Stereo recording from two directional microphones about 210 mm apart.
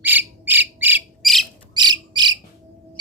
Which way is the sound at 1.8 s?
20° right (ahead or behind).